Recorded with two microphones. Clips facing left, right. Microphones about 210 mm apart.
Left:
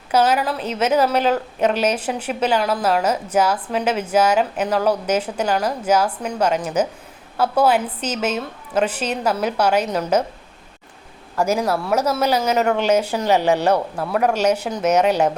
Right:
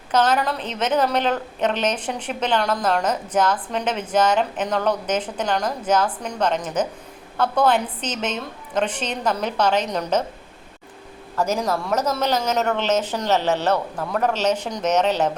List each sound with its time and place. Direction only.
0.1 s a woman's voice: 10° left (ahead or behind)
11.3 s a woman's voice: 10° left (ahead or behind)